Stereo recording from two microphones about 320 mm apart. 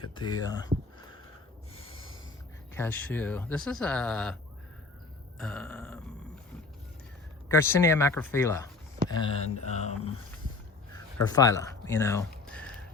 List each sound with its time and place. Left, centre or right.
0.0 s speech: centre
2.7 s speech: centre
5.4 s speech: centre
7.4 s speech: centre
11.3 s speech: centre